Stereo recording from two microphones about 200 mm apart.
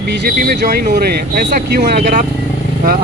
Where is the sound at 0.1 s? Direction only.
45° right (ahead or behind).